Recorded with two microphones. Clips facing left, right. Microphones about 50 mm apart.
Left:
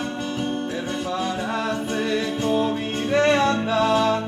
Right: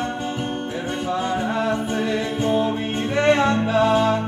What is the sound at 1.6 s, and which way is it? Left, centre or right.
Music, right.